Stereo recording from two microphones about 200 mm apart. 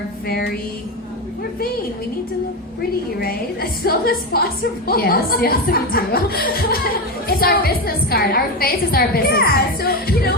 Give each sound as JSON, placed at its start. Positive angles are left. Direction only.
{"t": 0.3, "sound": "speech", "side_deg": 55}
{"t": 3.2, "sound": "speech", "side_deg": 50}